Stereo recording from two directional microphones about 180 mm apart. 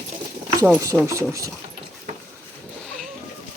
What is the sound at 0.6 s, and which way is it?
Speech, 10° right (ahead or behind).